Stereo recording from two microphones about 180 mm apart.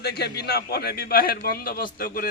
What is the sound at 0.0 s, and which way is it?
A man's voice, 60° left (ahead or behind).